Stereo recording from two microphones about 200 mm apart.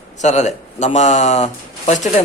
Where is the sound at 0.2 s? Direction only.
35° left (ahead or behind).